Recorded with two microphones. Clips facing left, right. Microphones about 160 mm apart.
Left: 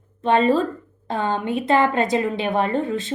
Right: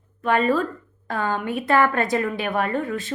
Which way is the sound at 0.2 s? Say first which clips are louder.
Left 3 dB; 25° left (ahead or behind).